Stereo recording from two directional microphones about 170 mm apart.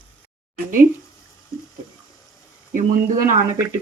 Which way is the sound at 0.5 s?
55° right (ahead or behind).